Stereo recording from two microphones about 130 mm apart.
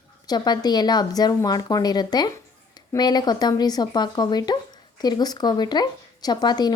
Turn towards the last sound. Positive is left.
turn(degrees=30)  # may be behind; listen again after turning